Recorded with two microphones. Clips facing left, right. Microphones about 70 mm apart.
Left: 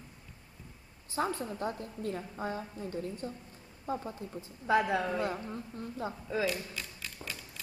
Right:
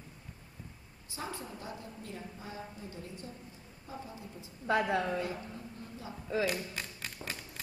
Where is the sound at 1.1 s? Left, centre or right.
Left.